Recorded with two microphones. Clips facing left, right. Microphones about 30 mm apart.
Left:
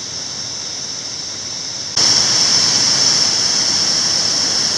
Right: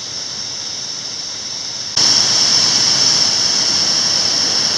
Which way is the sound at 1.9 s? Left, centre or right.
Centre.